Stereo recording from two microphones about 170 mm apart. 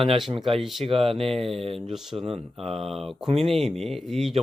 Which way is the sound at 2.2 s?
35° right (ahead or behind).